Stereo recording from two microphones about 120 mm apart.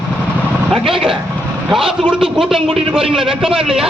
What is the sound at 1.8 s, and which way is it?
A man's voice, 45° right (ahead or behind).